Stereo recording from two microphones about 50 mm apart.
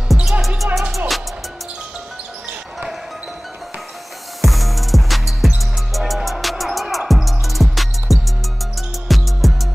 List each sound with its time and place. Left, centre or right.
0.1 s music: centre
4.4 s music: centre